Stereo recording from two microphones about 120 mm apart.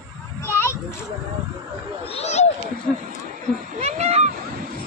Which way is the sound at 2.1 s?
60° left (ahead or behind).